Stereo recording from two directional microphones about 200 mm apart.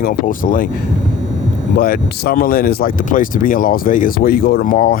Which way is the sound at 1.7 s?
45° left (ahead or behind).